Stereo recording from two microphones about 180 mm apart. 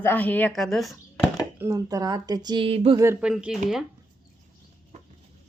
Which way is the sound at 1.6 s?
20° right (ahead or behind).